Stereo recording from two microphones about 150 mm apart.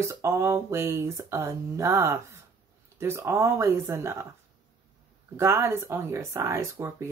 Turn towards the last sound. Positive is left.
turn(degrees=-20)  # may be behind; listen again after turning